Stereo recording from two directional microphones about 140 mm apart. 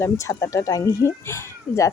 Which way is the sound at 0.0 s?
20° left (ahead or behind).